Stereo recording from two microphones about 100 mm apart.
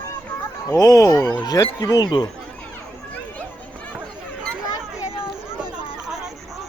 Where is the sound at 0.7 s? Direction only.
35° left (ahead or behind).